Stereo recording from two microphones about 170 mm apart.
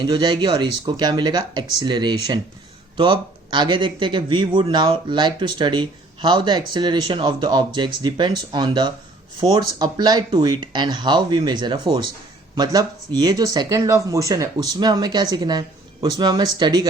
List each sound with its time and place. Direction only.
0.0 s speech: 25° right (ahead or behind)